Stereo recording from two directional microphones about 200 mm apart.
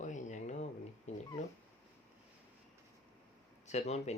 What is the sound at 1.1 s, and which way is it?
Cat, 35° left (ahead or behind).